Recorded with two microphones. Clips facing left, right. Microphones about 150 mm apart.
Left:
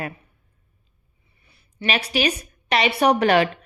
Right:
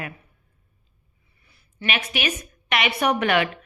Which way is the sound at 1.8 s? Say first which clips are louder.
Left 4 dB; 35° left (ahead or behind).